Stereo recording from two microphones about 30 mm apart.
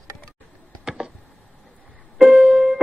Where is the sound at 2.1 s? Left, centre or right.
Right.